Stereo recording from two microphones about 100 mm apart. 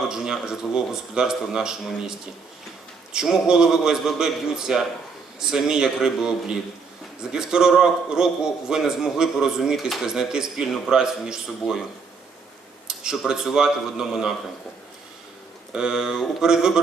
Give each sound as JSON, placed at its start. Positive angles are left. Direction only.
{"t": 0.1, "sound": "a man's voice", "side_deg": -5}
{"t": 12.9, "sound": "a man's voice", "side_deg": -5}
{"t": 15.7, "sound": "a man's voice", "side_deg": -5}